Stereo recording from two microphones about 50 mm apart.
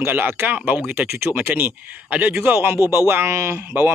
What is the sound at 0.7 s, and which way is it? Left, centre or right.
Speech, right.